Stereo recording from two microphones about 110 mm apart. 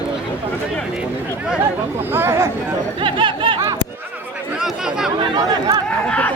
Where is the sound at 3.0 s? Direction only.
50° right (ahead or behind).